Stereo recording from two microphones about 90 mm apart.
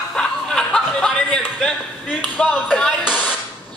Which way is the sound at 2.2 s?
15° left (ahead or behind).